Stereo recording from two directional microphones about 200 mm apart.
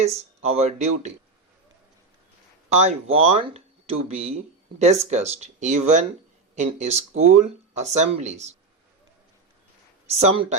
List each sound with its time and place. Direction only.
0.0 s speech: 30° right (ahead or behind)
2.6 s speech: 30° right (ahead or behind)
10.1 s speech: 30° right (ahead or behind)